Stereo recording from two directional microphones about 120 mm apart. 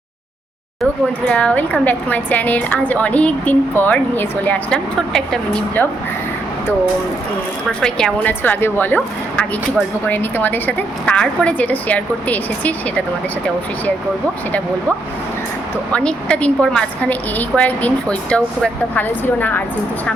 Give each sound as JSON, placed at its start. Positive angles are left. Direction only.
{"t": 1.3, "sound": "a woman's voice", "side_deg": 10}
{"t": 7.7, "sound": "a woman's voice", "side_deg": 5}
{"t": 8.3, "sound": "a woman's voice", "side_deg": 15}
{"t": 15.9, "sound": "a woman's voice", "side_deg": 10}